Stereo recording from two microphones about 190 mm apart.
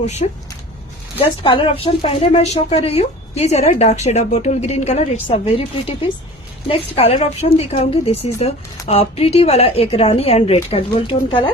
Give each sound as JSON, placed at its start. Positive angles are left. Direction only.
{"t": 0.0, "sound": "a woman's voice", "side_deg": 35}